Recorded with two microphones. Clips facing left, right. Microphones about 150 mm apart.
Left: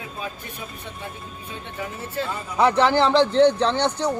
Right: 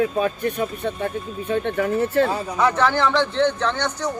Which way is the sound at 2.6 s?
30° left (ahead or behind).